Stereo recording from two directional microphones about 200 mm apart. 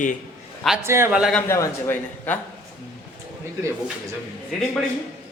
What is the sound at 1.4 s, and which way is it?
Speech, 15° left (ahead or behind).